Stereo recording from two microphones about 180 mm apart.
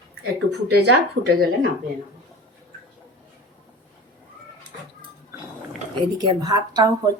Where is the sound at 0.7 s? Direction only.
70° right (ahead or behind).